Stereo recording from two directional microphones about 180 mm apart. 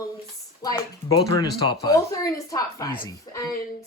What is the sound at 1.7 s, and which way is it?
Speech, 20° left (ahead or behind).